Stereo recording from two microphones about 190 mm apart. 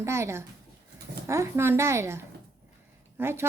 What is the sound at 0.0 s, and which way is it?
A woman's voice, 15° right (ahead or behind).